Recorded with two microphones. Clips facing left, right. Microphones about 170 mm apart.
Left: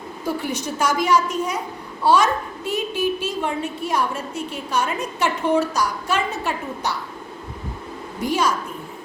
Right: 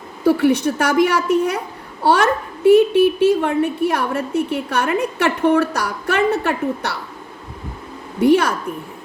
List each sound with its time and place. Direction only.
0.3 s a woman's voice: 65° right (ahead or behind)
8.2 s a woman's voice: 60° right (ahead or behind)